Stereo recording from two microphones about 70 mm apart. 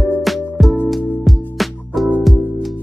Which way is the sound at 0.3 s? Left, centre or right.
Centre.